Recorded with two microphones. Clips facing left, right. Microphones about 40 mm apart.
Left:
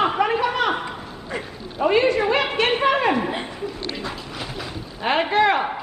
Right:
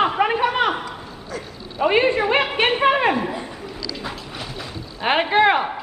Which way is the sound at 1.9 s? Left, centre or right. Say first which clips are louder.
Even; right.